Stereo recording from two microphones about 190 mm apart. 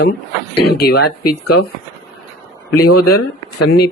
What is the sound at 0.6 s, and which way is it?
Speech, 55° left (ahead or behind).